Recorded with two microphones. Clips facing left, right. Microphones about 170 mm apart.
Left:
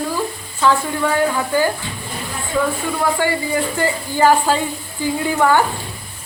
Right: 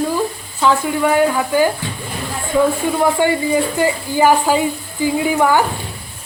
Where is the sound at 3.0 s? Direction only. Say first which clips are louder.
Right 3 dB; 20° right (ahead or behind).